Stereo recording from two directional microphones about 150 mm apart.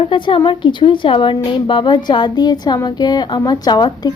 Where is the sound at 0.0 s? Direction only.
35° left (ahead or behind).